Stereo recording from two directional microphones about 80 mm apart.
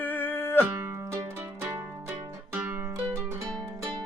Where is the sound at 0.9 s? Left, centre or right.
Right.